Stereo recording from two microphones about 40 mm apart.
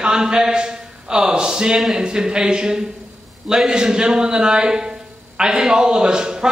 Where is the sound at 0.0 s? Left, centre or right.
Centre.